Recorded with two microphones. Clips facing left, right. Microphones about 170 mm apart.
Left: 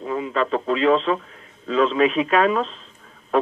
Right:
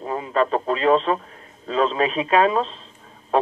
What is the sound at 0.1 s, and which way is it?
A man's voice, 40° right (ahead or behind).